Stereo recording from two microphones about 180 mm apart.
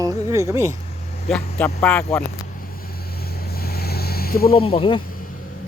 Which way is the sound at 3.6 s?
60° left (ahead or behind).